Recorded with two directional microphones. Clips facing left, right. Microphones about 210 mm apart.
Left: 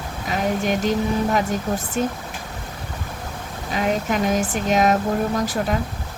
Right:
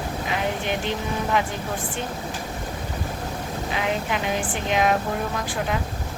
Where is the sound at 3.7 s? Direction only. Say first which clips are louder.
Left 6 dB; 40° left (ahead or behind).